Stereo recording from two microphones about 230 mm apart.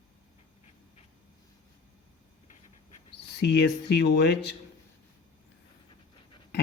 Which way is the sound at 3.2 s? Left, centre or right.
Left.